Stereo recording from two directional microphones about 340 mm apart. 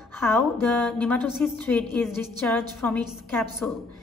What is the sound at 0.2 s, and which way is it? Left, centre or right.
A woman's voice, centre.